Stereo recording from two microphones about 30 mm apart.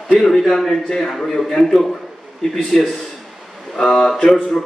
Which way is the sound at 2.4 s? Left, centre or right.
Left.